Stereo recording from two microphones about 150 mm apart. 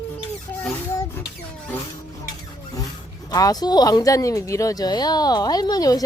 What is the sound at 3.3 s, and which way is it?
Speech, 25° left (ahead or behind).